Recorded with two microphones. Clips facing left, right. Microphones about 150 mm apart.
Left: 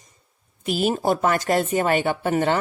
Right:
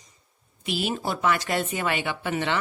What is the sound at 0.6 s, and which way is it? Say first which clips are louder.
Speech: left 7 dB; 45° left (ahead or behind).